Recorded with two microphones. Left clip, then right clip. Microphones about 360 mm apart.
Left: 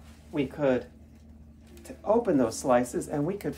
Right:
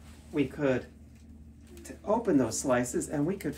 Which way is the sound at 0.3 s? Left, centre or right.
Centre.